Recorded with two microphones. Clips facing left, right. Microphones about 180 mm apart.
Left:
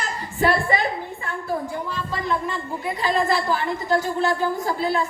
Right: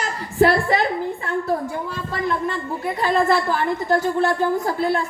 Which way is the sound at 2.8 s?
55° right (ahead or behind).